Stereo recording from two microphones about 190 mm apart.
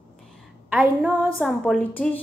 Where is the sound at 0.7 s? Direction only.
10° right (ahead or behind).